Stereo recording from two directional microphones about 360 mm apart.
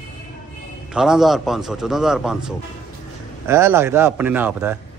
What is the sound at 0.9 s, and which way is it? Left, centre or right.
A man's voice, centre.